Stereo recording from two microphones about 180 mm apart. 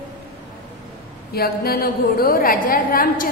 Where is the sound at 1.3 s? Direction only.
60° left (ahead or behind).